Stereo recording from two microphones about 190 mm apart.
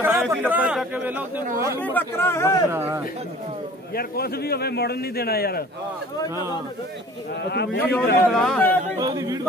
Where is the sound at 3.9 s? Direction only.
55° left (ahead or behind).